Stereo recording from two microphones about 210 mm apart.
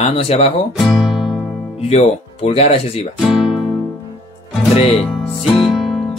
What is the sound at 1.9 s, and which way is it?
Speech, 30° left (ahead or behind).